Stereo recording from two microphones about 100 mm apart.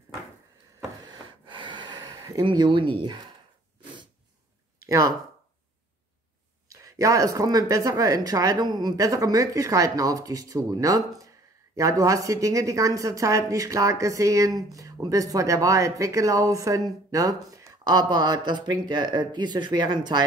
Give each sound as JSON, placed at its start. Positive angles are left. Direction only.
{"t": 1.0, "sound": "a sound", "side_deg": -50}
{"t": 2.4, "sound": "speech", "side_deg": -50}
{"t": 4.8, "sound": "speech", "side_deg": -35}
{"t": 6.7, "sound": "speech", "side_deg": -35}
{"t": 18.1, "sound": "speech", "side_deg": -50}